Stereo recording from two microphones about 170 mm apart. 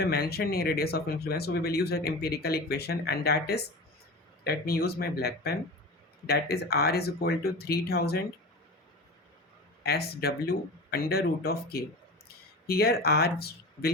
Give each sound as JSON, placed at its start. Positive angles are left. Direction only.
{"t": 0.0, "sound": "speech", "side_deg": 70}
{"t": 9.8, "sound": "speech", "side_deg": 70}